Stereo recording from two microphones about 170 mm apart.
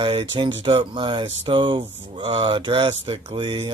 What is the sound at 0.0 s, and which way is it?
Speech, 30° right (ahead or behind).